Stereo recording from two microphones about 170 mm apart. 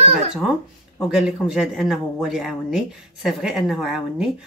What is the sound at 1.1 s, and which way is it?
A man's voice, 5° right (ahead or behind).